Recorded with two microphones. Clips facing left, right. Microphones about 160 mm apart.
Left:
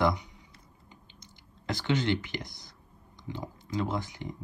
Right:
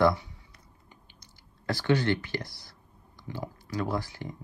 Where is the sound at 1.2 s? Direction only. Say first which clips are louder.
Left 3 dB; 20° left (ahead or behind).